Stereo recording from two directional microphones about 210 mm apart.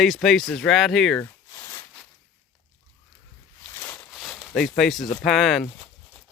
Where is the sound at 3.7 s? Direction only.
15° left (ahead or behind).